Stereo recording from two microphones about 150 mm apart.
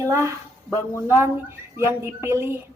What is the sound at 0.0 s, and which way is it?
A woman's voice, 20° right (ahead or behind).